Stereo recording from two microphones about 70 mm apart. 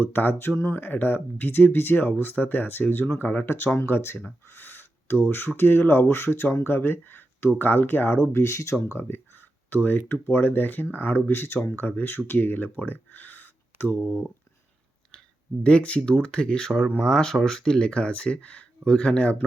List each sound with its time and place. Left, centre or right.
0.0 s speech: left
4.4 s a sound: left
5.2 s speech: left
15.6 s speech: centre